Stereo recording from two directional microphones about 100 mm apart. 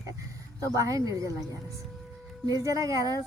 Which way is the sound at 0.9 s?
35° right (ahead or behind).